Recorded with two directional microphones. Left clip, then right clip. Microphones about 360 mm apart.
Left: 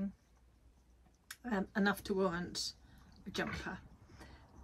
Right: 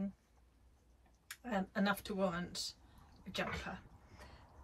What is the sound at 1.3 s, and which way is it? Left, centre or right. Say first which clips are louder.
Speech: left 1 dB; centre.